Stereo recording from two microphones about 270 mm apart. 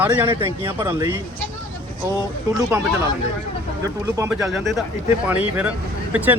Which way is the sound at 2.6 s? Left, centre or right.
Centre.